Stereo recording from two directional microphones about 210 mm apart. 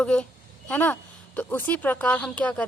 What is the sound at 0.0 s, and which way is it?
A woman's voice, 5° left (ahead or behind).